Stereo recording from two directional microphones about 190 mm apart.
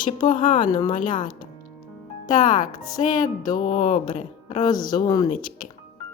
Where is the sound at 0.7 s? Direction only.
20° left (ahead or behind).